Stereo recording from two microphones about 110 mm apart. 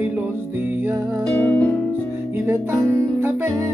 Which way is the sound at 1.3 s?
15° left (ahead or behind).